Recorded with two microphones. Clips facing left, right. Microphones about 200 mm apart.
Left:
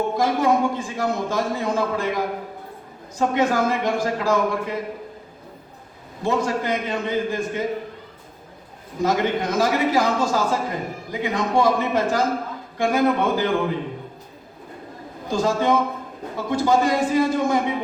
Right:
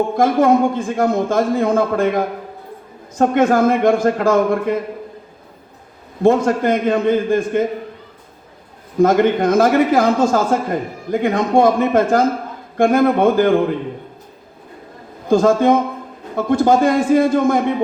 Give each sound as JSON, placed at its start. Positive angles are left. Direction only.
{"t": 0.2, "sound": "a man's voice", "side_deg": -50}
{"t": 6.2, "sound": "a man's voice", "side_deg": -50}
{"t": 9.0, "sound": "a man's voice", "side_deg": -55}
{"t": 15.3, "sound": "a man's voice", "side_deg": -50}